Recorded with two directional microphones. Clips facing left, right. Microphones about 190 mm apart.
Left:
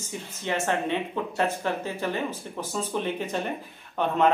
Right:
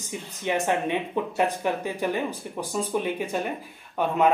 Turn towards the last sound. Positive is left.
turn(degrees=-10)  # may be behind; listen again after turning